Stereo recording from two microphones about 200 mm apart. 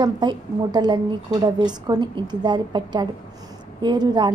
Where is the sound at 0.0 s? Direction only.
20° right (ahead or behind).